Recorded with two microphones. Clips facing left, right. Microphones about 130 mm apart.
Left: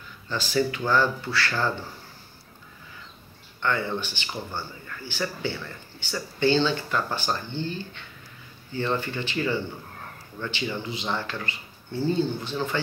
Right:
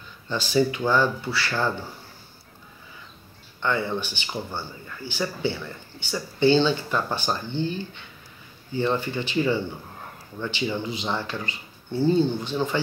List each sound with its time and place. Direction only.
0.3 s a man's voice: 20° right (ahead or behind)
3.6 s a man's voice: 15° right (ahead or behind)